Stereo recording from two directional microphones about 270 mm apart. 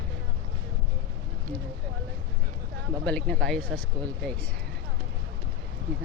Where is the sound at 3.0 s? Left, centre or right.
Centre.